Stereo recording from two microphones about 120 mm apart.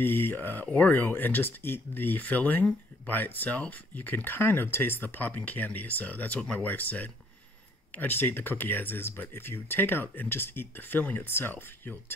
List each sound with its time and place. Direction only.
0.0 s speech: 15° left (ahead or behind)